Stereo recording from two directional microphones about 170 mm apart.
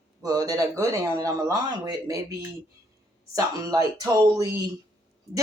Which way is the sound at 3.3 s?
20° right (ahead or behind).